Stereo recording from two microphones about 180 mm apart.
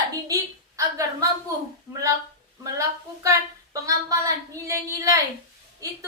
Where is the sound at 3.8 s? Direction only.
20° right (ahead or behind).